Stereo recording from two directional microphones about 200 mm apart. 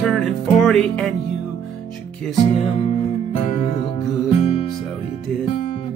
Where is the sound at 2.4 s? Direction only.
30° left (ahead or behind).